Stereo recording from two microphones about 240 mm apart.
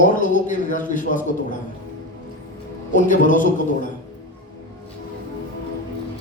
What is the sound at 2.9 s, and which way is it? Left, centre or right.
Speech, left.